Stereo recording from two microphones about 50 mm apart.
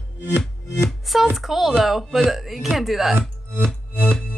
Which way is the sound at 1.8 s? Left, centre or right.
Centre.